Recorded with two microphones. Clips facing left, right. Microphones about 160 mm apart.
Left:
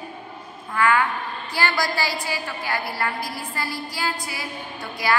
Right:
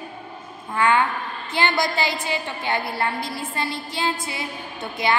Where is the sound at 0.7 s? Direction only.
25° right (ahead or behind).